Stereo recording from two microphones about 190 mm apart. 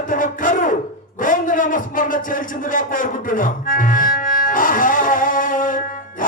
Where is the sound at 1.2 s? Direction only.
45° left (ahead or behind).